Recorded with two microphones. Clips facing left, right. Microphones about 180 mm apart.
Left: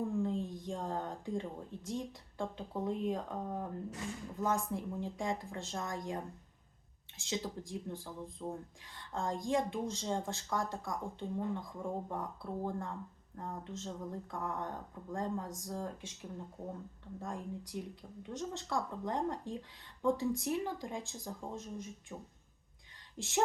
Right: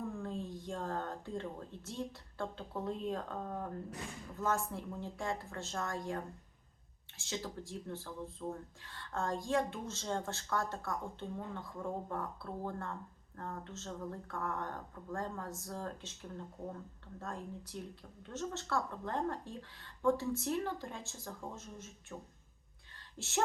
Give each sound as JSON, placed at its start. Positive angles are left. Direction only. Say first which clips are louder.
{"t": 0.2, "sound": "a woman's voice", "louder": "left 6 dB", "side_deg": 15}